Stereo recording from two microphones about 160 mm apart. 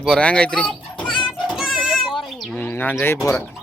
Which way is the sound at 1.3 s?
Centre (ahead or behind).